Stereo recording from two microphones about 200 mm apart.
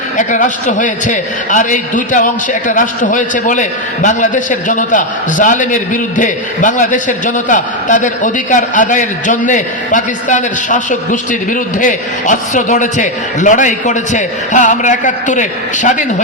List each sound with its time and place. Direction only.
0.2 s a man's voice: 40° left (ahead or behind)